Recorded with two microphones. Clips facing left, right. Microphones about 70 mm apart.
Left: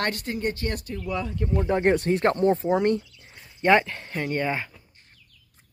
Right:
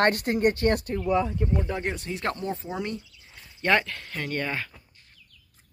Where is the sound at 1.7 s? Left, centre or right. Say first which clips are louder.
Left 9 dB; left.